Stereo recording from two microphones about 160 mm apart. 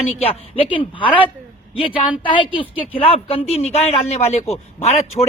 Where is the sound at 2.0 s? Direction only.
30° left (ahead or behind).